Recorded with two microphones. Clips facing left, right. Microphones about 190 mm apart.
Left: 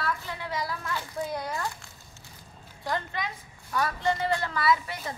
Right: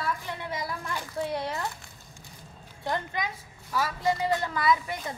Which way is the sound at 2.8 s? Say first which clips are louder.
Right 1 dB; 20° right (ahead or behind).